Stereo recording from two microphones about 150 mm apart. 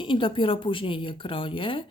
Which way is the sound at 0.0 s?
35° left (ahead or behind).